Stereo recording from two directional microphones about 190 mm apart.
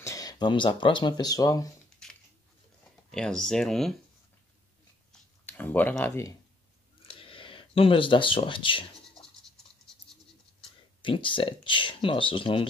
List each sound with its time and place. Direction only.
0.0 s speech: 20° left (ahead or behind)
2.0 s a sound: 5° left (ahead or behind)
3.1 s speech: 5° left (ahead or behind)
5.4 s speech: 10° left (ahead or behind)
7.2 s speech: 25° left (ahead or behind)
11.0 s speech: 25° left (ahead or behind)